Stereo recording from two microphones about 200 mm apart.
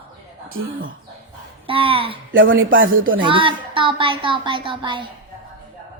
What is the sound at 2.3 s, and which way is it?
Speech, 75° right (ahead or behind).